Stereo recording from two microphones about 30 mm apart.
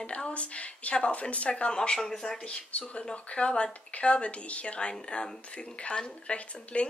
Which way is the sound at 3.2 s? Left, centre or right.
Left.